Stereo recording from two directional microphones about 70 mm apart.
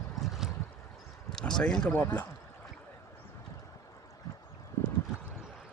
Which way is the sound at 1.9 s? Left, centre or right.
Left.